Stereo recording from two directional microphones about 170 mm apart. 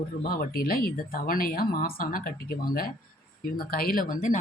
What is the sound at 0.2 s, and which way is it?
Speech, 60° left (ahead or behind).